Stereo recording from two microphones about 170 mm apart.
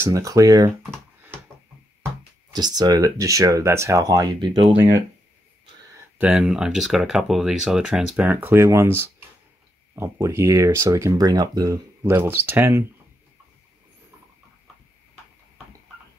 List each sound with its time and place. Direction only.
0.0 s speech: 20° right (ahead or behind)
2.5 s speech: 25° right (ahead or behind)
6.1 s speech: 5° right (ahead or behind)